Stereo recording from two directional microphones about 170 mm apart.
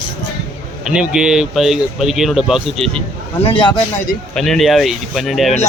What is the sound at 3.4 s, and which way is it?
Speech, 30° left (ahead or behind).